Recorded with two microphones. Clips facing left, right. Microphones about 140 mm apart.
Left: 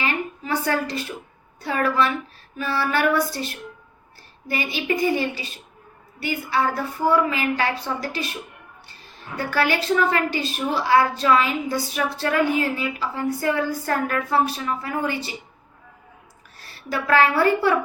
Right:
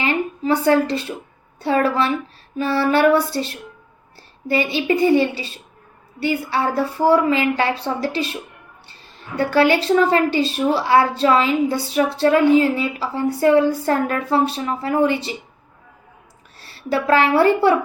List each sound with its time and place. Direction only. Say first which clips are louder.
0.0 s a sound: right 6 dB; 30° right (ahead or behind)
1.6 s a woman's voice: right 4 dB; 30° right (ahead or behind)
9.4 s a woman's voice: right 7 dB; 25° right (ahead or behind)
16.6 s a woman's voice: right 6 dB; 25° right (ahead or behind)